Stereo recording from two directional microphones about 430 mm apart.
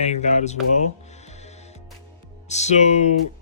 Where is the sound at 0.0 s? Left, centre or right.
Centre.